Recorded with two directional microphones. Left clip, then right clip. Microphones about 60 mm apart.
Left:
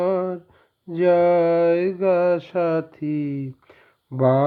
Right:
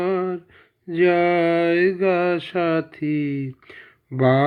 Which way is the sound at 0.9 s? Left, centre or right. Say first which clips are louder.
Even; left.